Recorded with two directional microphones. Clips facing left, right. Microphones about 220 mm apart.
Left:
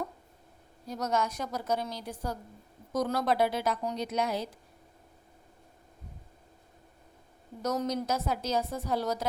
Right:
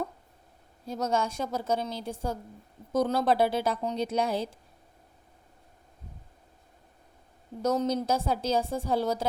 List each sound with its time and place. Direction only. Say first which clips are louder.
0.9 s a woman's voice: right 2 dB; 30° right (ahead or behind)
7.6 s a woman's voice: right 4 dB; 30° right (ahead or behind)